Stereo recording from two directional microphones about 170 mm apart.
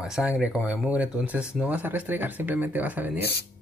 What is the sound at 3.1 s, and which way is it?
Speech, 70° left (ahead or behind).